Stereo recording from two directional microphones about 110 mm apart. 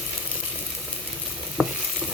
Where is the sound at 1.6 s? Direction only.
10° left (ahead or behind).